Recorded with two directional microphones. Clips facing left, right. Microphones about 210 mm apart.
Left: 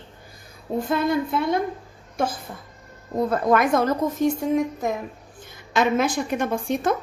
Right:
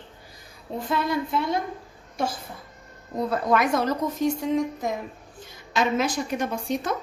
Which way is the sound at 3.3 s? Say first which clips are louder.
Left 3 dB; 50° left (ahead or behind).